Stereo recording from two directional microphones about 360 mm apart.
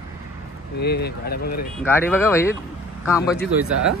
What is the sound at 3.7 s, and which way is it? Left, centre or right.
Speech, right.